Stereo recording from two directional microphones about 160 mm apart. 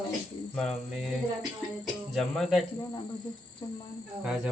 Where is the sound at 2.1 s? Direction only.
Centre (ahead or behind).